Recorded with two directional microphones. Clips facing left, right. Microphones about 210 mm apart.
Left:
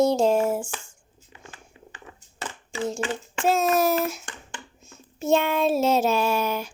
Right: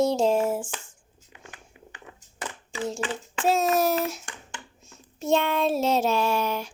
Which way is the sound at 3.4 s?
Centre (ahead or behind).